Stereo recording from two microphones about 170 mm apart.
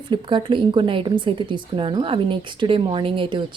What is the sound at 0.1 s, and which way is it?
Speech, 30° right (ahead or behind).